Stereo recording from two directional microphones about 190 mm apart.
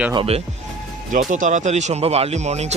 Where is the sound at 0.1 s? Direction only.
30° right (ahead or behind).